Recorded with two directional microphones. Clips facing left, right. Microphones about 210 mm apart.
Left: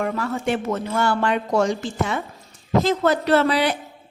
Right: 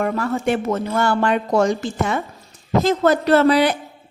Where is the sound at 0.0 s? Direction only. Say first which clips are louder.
Right 3 dB; 50° right (ahead or behind).